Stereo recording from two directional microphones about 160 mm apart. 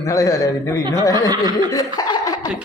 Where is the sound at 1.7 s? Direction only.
25° left (ahead or behind).